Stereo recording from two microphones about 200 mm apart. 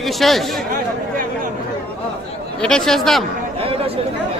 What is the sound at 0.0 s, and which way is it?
Speech, centre (ahead or behind).